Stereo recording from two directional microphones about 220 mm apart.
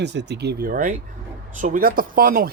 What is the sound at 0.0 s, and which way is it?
Speech, 50° right (ahead or behind).